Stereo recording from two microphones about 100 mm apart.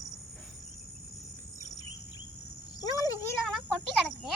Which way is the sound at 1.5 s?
40° left (ahead or behind).